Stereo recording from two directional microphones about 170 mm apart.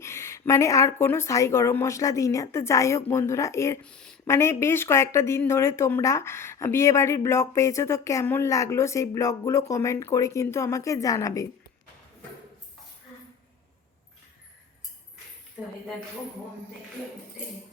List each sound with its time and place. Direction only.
0.0 s speech: 15° left (ahead or behind)
3.8 s speech: 5° left (ahead or behind)
4.3 s speech: 15° left (ahead or behind)